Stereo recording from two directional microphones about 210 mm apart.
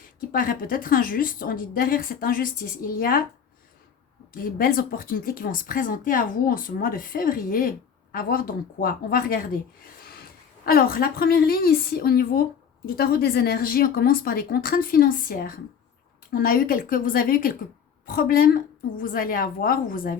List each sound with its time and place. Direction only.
0.3 s a woman's voice: 40° left (ahead or behind)
4.3 s a woman's voice: 45° left (ahead or behind)
10.7 s a woman's voice: 45° left (ahead or behind)